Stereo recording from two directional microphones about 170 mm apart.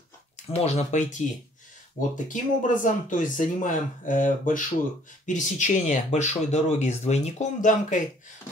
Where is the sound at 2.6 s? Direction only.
50° left (ahead or behind).